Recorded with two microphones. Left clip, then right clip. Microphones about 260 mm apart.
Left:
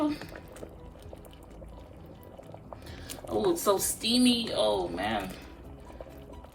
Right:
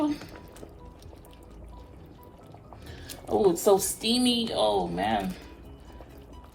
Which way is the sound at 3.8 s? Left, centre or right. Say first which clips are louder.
Right 1 dB; centre.